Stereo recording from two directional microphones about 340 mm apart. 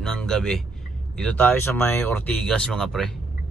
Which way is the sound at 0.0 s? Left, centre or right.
Centre.